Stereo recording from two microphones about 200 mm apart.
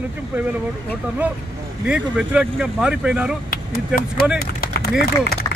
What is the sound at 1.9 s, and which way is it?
Speech, 5° right (ahead or behind).